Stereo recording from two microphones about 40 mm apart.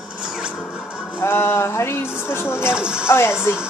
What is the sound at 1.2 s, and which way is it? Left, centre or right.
Speech, left.